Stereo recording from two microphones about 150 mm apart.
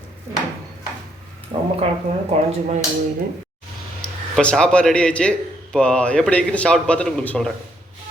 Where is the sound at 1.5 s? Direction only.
40° right (ahead or behind).